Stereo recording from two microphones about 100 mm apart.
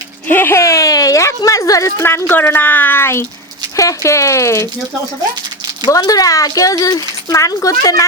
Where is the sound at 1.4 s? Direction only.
35° left (ahead or behind).